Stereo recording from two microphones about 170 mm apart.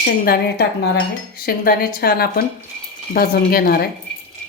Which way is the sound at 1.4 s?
60° left (ahead or behind).